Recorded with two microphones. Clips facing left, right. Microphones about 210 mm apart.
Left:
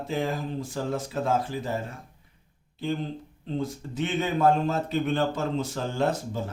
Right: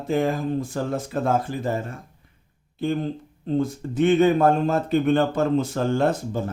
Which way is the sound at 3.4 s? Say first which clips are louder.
Right 7 dB; 50° right (ahead or behind).